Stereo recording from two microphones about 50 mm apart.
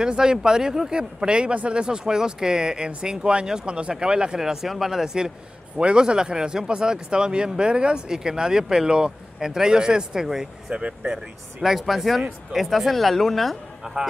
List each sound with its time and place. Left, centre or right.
0.0 s speech: centre
10.8 s speech: right
11.6 s speech: centre